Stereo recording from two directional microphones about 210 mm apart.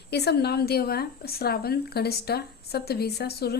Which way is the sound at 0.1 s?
50° left (ahead or behind).